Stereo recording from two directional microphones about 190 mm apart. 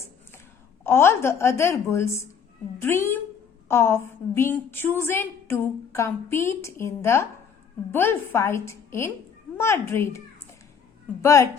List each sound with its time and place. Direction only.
0.9 s a woman's voice: 15° left (ahead or behind)